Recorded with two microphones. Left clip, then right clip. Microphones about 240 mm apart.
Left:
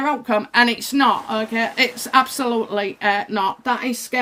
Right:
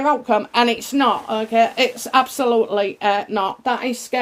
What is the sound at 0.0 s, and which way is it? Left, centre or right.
Speech, left.